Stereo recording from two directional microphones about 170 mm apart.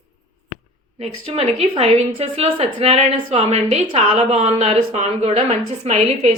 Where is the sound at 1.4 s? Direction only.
35° right (ahead or behind).